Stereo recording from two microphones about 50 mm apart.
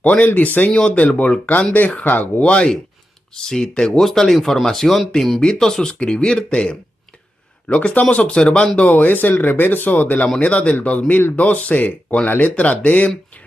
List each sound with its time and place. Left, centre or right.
0.0 s speech: left
2.4 s speech: centre
8.9 s speech: left
10.4 s speech: left